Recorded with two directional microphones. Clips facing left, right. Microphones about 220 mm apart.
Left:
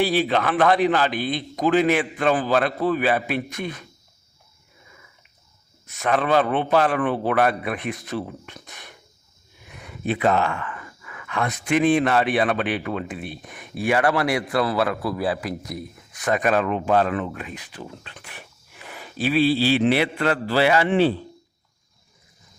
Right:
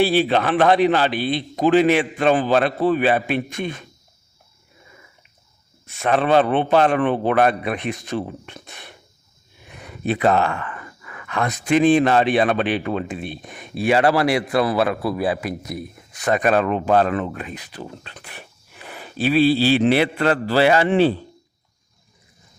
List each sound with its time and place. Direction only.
0.2 s a man's voice: 25° right (ahead or behind)
5.8 s a man's voice: 30° right (ahead or behind)
10.1 s speech: 35° right (ahead or behind)